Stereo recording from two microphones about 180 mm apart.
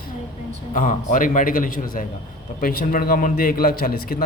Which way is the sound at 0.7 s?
45° left (ahead or behind).